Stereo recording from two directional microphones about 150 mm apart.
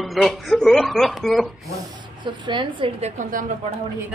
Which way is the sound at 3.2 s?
60° right (ahead or behind).